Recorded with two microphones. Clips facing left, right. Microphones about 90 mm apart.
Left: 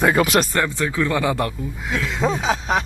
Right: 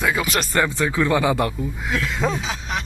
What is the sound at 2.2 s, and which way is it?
Speech, centre (ahead or behind).